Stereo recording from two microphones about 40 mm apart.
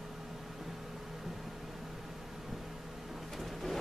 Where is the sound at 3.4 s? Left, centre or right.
Centre.